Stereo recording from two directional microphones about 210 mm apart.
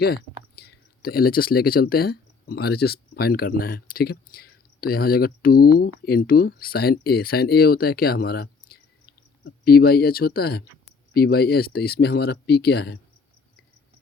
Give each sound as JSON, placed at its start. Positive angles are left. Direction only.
{"t": 0.5, "sound": "speech", "side_deg": 45}